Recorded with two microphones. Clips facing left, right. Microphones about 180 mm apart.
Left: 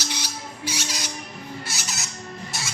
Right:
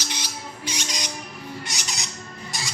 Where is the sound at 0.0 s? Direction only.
10° left (ahead or behind).